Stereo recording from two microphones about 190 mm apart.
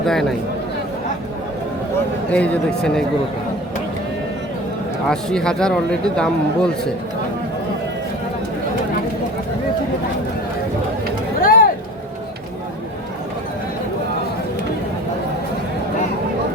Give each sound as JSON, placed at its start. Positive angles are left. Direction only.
{"t": 0.0, "sound": "speech", "side_deg": 0}
{"t": 2.3, "sound": "speech", "side_deg": 5}
{"t": 5.0, "sound": "speech", "side_deg": 5}
{"t": 11.3, "sound": "vehicle", "side_deg": 50}